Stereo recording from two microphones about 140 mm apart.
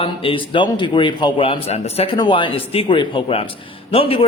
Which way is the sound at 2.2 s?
35° left (ahead or behind).